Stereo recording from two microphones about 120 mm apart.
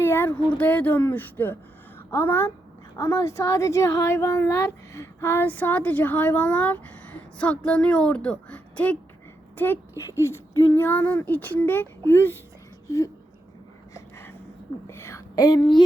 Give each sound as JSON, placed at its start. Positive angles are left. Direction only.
{"t": 0.0, "sound": "speech", "side_deg": 20}
{"t": 13.9, "sound": "a sound", "side_deg": 20}
{"t": 14.8, "sound": "a woman's voice", "side_deg": 20}